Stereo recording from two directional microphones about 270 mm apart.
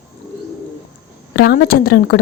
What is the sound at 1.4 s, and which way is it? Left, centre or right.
Speech, left.